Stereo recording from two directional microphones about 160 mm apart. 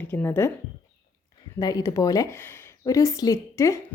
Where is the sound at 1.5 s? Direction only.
25° left (ahead or behind).